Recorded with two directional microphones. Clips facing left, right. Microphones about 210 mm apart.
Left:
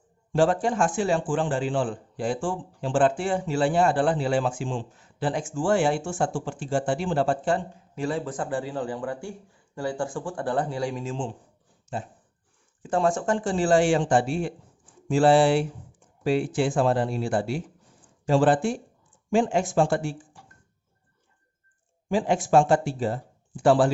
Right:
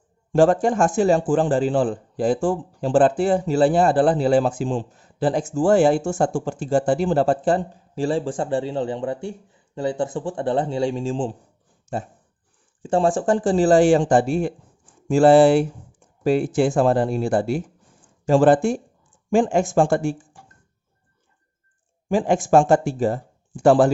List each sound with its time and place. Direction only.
0.3 s a man's voice: 45° right (ahead or behind)
11.9 s speech: 45° right (ahead or behind)
12.8 s a man's voice: 30° right (ahead or behind); by 20.4 s 45° right (ahead or behind)
22.1 s speech: 50° right (ahead or behind)